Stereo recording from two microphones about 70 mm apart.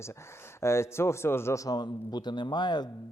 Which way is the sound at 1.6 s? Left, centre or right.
Left.